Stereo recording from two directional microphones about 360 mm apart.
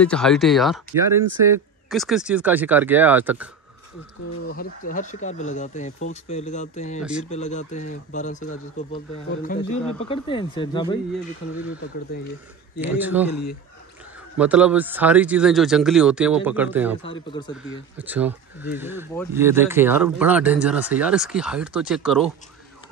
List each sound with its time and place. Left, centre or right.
0.0 s speech: centre
4.5 s speech: left
7.0 s speech: centre
7.2 s speech: centre
12.8 s speech: centre
14.4 s speech: centre
17.0 s speech: centre
17.9 s speech: centre